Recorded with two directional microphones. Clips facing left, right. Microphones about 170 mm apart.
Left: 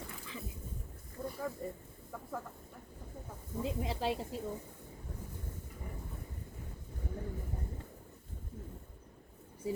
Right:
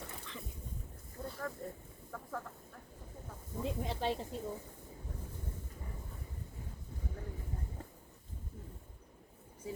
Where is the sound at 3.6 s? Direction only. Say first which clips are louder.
Left 1 dB; centre (ahead or behind).